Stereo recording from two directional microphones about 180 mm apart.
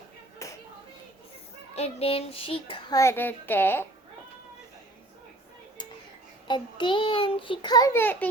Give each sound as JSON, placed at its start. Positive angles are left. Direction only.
{"t": 0.4, "sound": "clapping", "side_deg": 15}
{"t": 1.7, "sound": "child singing", "side_deg": 35}
{"t": 3.0, "sound": "a woman's voice", "side_deg": 15}
{"t": 6.5, "sound": "a child's voice", "side_deg": 25}